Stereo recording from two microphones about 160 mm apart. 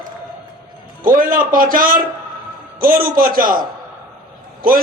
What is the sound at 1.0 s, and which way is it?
A man's voice, 60° right (ahead or behind).